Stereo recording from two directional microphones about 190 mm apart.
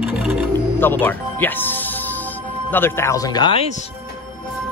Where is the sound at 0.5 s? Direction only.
10° left (ahead or behind); by 3.7 s 25° left (ahead or behind).